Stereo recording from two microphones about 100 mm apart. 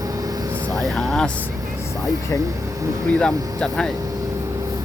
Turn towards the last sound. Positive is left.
turn(degrees=10)  # may be behind; listen again after turning